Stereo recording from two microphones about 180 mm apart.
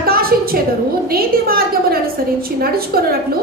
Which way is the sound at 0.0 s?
55° right (ahead or behind).